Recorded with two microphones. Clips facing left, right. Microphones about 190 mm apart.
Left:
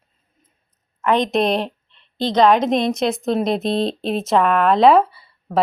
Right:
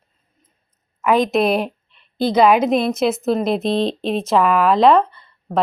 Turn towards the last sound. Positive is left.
turn(degrees=5)  # may be behind; listen again after turning